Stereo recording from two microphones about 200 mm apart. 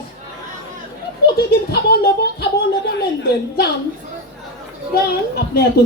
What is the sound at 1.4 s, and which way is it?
A woman's voice, 50° left (ahead or behind).